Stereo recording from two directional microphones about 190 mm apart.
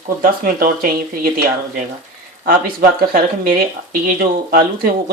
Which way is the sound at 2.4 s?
50° right (ahead or behind).